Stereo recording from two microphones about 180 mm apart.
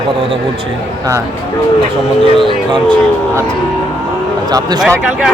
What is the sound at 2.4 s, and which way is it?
Speech, 25° right (ahead or behind).